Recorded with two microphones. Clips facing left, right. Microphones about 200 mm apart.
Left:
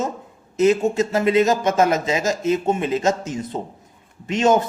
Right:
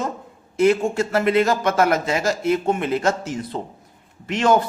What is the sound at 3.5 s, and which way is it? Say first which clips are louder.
Speech: left 1 dB; 30° left (ahead or behind).